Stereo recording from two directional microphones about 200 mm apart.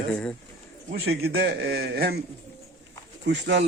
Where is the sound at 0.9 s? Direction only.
55° right (ahead or behind).